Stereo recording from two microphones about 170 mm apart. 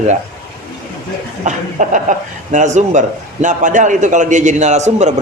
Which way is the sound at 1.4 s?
45° right (ahead or behind).